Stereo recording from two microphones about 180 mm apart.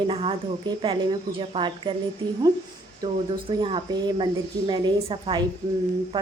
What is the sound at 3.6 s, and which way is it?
A woman's voice, 25° right (ahead or behind).